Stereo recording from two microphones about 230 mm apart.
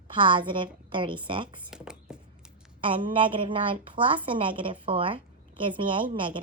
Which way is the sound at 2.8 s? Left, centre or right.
Right.